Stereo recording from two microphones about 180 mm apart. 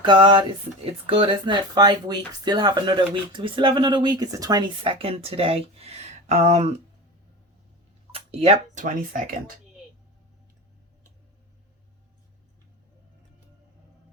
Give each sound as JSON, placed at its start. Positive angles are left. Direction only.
{"t": 0.0, "sound": "speech", "side_deg": -25}
{"t": 8.1, "sound": "speech", "side_deg": -35}